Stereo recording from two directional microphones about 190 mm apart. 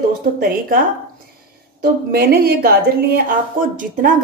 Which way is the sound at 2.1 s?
55° right (ahead or behind).